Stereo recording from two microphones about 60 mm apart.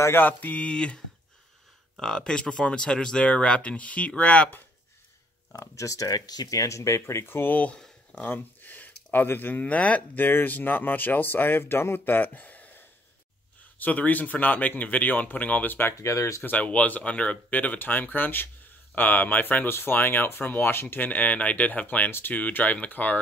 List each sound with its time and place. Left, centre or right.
0.1 s speech: left
5.5 s speech: left
7.7 s a sound: centre
8.2 s speech: left
16.0 s speech: left
16.4 s speech: left